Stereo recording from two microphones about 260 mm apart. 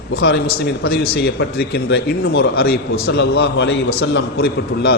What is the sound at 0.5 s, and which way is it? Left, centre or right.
A man's voice, left.